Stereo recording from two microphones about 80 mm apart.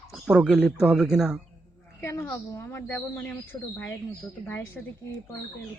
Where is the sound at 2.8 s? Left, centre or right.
Centre.